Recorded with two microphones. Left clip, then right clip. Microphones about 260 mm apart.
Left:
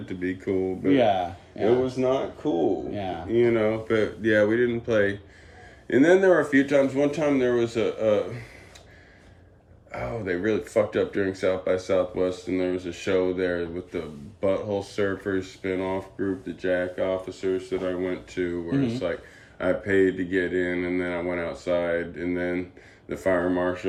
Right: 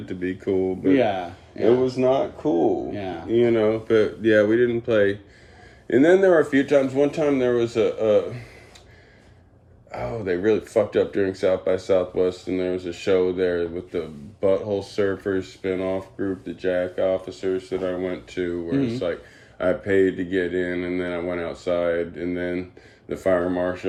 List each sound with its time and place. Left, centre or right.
0.1 s speech: centre
0.9 s speech: centre
1.8 s speech: centre
2.4 s speech: right
2.9 s speech: centre
3.2 s speech: centre
9.9 s speech: centre
19.5 s speech: centre